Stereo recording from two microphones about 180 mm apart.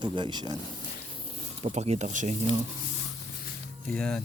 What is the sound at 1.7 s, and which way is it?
Speech, 40° right (ahead or behind).